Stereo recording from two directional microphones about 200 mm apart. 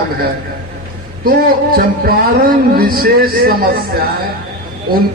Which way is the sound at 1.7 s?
50° right (ahead or behind).